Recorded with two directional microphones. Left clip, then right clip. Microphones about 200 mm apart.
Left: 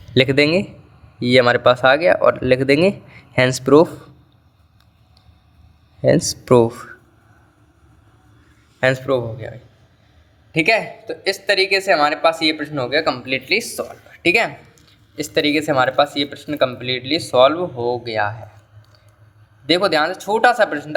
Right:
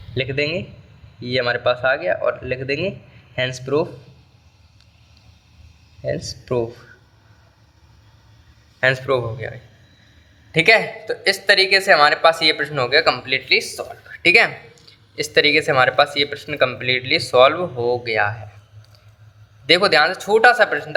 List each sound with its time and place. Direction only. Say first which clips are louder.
0.1 s speech: left 7 dB; 35° left (ahead or behind)
6.0 s speech: left 10 dB; 35° left (ahead or behind)
8.8 s speech: even; 20° left (ahead or behind)
13.2 s speech: right 1 dB; 30° left (ahead or behind)
14.1 s speech: right 3 dB; 15° left (ahead or behind)
19.6 s speech: right 2 dB; 15° left (ahead or behind)